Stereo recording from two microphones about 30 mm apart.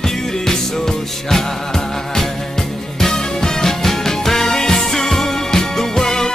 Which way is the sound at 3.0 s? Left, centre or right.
Centre.